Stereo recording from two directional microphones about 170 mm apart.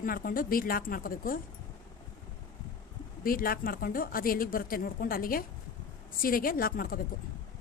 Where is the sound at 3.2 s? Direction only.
60° left (ahead or behind).